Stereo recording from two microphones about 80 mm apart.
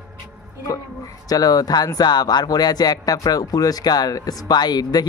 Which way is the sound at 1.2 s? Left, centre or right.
Left.